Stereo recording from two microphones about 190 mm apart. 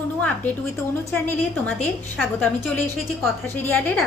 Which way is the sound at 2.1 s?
5° left (ahead or behind).